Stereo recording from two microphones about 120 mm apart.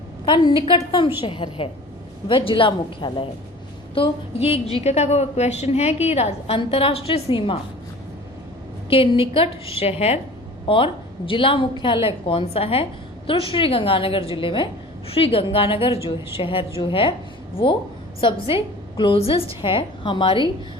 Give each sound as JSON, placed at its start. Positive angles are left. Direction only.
{"t": 0.3, "sound": "a woman's voice", "side_deg": 40}
{"t": 6.6, "sound": "a woman's voice", "side_deg": 50}
{"t": 8.9, "sound": "a woman's voice", "side_deg": 50}
{"t": 10.7, "sound": "a woman's voice", "side_deg": 45}
{"t": 18.2, "sound": "a woman's voice", "side_deg": 45}